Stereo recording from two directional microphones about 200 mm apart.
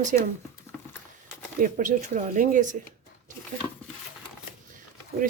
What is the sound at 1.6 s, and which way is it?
Speech, 40° right (ahead or behind).